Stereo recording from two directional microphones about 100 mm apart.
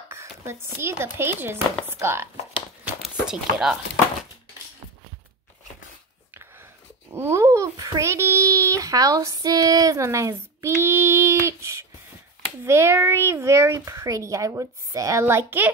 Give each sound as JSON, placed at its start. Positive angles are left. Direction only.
{"t": 0.1, "sound": "a child's voice", "side_deg": -30}
{"t": 3.3, "sound": "speech", "side_deg": -5}
{"t": 7.2, "sound": "babbling", "side_deg": -25}
{"t": 12.6, "sound": "a child's voice", "side_deg": -25}